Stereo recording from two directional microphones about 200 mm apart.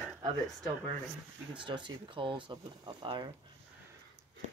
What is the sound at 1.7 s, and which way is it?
Speech, 25° right (ahead or behind).